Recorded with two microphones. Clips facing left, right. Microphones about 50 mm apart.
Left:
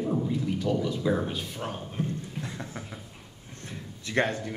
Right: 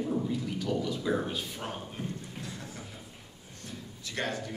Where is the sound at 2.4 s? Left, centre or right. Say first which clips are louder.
Left 4 dB; left.